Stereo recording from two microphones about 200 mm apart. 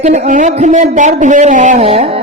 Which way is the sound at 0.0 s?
35° right (ahead or behind).